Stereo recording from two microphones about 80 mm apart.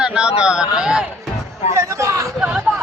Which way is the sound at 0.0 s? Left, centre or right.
Centre.